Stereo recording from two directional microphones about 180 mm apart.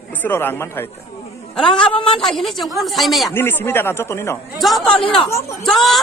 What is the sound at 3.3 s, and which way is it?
A man's voice, 10° left (ahead or behind).